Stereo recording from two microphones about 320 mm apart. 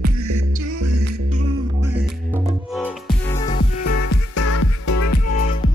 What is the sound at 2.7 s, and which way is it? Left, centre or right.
Music, centre.